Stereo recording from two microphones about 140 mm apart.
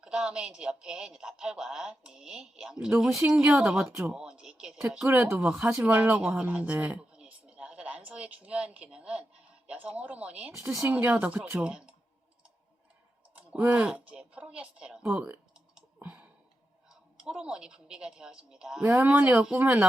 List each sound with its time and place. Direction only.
0.0 s a woman's voice: 5° right (ahead or behind)
3.8 s a woman's voice: 15° right (ahead or behind)
4.2 s a woman's voice: 5° right (ahead or behind)
13.3 s a woman's voice: 10° right (ahead or behind)